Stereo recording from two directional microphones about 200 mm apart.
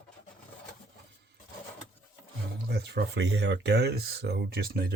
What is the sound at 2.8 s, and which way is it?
Speech, 60° right (ahead or behind).